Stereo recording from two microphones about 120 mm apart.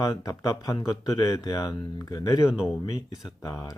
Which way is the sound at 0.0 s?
30° left (ahead or behind).